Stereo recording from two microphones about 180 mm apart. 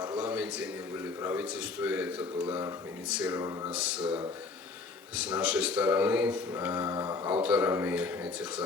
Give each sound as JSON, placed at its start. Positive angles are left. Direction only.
{"t": 0.2, "sound": "a sound", "side_deg": -10}
{"t": 1.2, "sound": "speech", "side_deg": -10}
{"t": 4.0, "sound": "speech", "side_deg": -25}
{"t": 5.2, "sound": "speech", "side_deg": -5}